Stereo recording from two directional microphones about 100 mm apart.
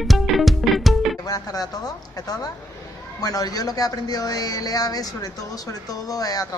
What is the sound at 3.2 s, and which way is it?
Speech, 40° left (ahead or behind).